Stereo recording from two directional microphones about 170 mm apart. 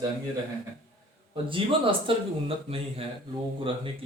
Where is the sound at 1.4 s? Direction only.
30° right (ahead or behind).